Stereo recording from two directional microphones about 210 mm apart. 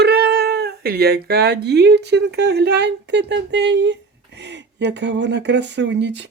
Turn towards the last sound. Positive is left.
turn(degrees=-55)  # may be behind; listen again after turning